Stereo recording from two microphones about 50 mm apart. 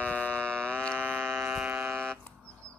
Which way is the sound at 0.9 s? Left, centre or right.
Right.